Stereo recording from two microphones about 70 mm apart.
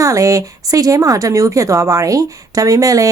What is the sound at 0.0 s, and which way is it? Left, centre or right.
Speech, right.